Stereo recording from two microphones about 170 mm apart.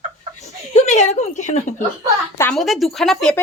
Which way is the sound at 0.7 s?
45° left (ahead or behind).